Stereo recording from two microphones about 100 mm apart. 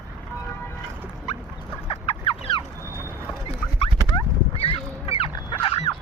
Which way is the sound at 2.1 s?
55° left (ahead or behind).